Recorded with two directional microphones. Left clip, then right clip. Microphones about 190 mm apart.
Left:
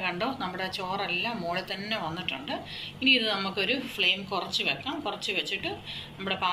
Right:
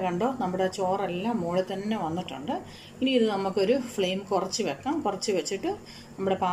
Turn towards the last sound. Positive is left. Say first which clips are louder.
# right 3 dB
turn(degrees=-40)  # may be behind; listen again after turning